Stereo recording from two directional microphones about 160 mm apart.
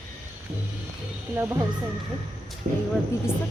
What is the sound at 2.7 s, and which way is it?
Speech, 55° right (ahead or behind).